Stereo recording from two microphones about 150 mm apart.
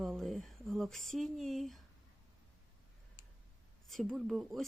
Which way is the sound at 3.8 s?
Centre (ahead or behind).